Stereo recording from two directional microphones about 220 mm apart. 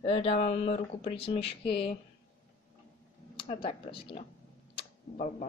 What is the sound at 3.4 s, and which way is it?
Speech, 25° left (ahead or behind).